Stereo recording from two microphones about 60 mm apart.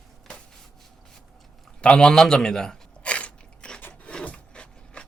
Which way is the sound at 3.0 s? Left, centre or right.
Centre.